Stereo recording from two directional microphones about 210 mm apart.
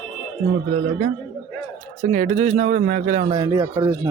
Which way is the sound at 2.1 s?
35° right (ahead or behind).